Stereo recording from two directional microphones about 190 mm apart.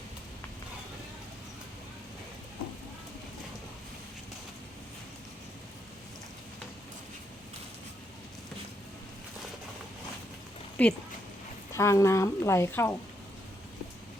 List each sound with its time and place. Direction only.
10.8 s a woman's voice: 5° left (ahead or behind)